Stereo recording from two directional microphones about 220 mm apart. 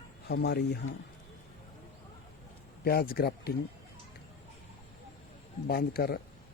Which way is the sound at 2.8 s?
45° left (ahead or behind).